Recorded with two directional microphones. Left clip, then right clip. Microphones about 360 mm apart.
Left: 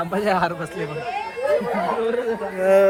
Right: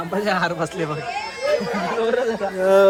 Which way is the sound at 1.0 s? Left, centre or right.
Left.